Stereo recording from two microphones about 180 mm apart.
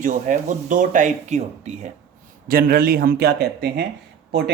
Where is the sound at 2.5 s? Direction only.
55° right (ahead or behind).